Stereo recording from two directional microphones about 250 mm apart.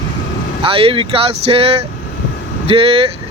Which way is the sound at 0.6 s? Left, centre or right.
Right.